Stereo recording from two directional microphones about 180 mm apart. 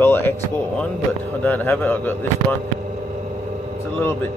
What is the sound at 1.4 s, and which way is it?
Speech, 10° left (ahead or behind).